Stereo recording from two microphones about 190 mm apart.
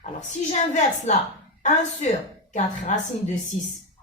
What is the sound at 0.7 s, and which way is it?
Speech, 40° left (ahead or behind).